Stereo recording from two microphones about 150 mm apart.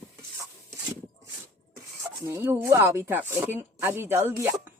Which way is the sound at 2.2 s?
15° right (ahead or behind).